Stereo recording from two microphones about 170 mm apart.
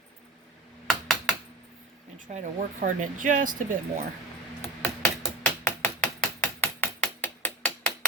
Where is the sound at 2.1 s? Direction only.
50° right (ahead or behind).